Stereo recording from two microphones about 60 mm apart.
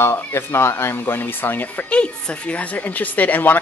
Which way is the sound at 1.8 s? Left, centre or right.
Centre.